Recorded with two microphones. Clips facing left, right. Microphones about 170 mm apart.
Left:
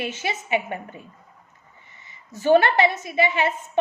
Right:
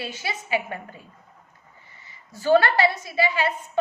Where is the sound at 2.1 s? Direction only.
20° left (ahead or behind).